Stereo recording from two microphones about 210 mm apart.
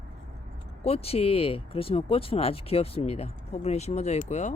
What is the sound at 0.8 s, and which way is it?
Speech, 30° left (ahead or behind).